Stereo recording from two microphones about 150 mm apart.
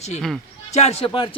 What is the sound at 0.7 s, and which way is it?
Speech, 45° left (ahead or behind).